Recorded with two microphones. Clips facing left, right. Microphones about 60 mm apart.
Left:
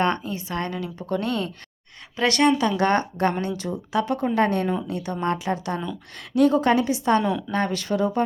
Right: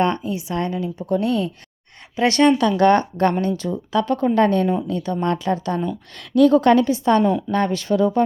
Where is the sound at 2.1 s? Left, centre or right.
Right.